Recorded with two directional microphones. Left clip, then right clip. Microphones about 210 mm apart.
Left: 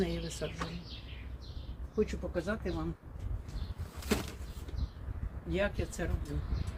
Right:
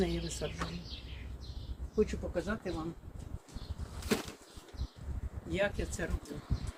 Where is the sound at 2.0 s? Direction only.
10° left (ahead or behind).